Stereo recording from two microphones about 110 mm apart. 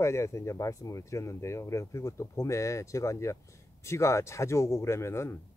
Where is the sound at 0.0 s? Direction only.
25° left (ahead or behind).